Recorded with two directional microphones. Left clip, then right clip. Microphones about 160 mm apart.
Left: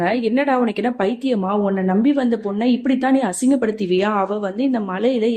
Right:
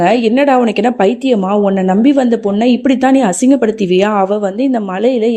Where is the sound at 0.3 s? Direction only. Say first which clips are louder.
Right 8 dB; 40° right (ahead or behind).